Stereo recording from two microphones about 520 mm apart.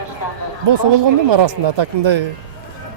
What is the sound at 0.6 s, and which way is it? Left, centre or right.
A man's voice, right.